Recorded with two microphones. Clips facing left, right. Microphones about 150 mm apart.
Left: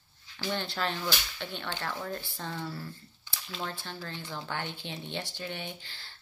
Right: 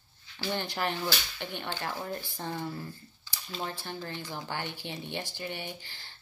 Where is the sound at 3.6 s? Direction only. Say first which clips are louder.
Right 2 dB; 15° right (ahead or behind).